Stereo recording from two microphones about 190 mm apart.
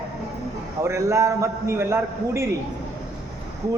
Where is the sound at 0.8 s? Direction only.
15° right (ahead or behind).